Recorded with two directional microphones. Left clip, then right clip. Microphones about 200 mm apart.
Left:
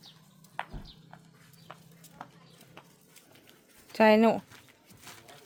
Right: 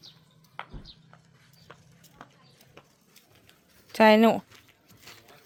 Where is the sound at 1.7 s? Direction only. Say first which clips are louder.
Left 2 dB; 5° left (ahead or behind).